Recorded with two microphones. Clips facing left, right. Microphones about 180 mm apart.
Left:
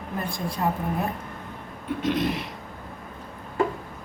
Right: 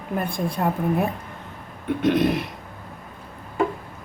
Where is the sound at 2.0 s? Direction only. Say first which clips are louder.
Right 6 dB; 60° right (ahead or behind).